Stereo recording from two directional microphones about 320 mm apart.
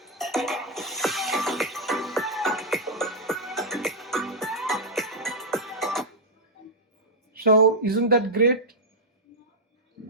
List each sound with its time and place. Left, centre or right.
0.0 s music: centre
7.3 s a woman's voice: right